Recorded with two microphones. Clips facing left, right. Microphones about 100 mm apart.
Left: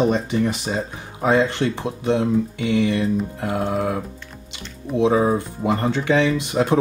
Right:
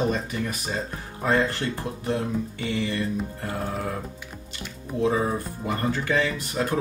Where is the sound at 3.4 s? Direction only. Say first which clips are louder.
Left 7 dB; 80° left.